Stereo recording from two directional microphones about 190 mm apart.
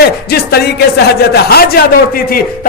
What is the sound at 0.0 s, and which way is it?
A man's voice, 55° left (ahead or behind).